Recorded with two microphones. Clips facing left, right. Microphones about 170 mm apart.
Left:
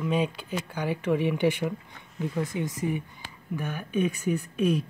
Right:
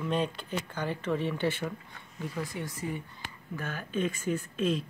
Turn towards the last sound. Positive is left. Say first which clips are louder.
# left 4 dB
turn(degrees=15)  # may be behind; listen again after turning